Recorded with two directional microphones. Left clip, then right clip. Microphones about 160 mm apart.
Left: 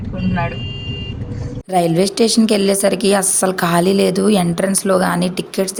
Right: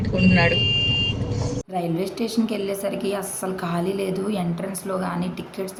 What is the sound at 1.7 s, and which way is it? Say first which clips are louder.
A woman's voice: left 13 dB; 45° left (ahead or behind).